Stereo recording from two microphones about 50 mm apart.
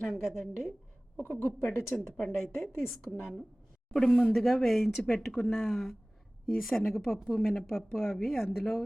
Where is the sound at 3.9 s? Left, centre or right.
Centre.